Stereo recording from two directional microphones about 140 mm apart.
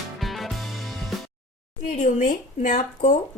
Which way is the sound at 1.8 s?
65° left (ahead or behind).